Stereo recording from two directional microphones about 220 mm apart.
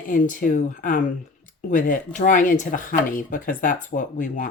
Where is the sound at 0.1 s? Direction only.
35° left (ahead or behind).